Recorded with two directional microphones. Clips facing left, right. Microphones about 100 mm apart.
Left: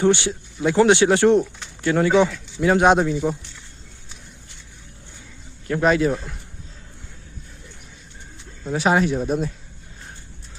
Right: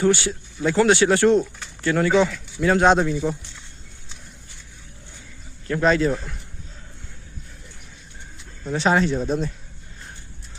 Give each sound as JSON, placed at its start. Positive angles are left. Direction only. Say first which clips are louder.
{"t": 0.0, "sound": "speech", "louder": "left 1 dB", "side_deg": 20}
{"t": 5.6, "sound": "speech", "louder": "left 1 dB", "side_deg": 15}
{"t": 8.6, "sound": "speech", "louder": "left 1 dB", "side_deg": 10}